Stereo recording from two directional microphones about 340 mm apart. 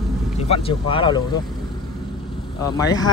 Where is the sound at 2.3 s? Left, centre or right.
Centre.